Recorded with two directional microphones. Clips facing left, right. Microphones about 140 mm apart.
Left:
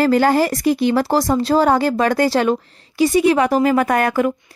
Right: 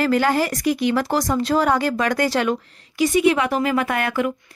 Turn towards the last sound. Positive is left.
turn(degrees=40)  # may be behind; listen again after turning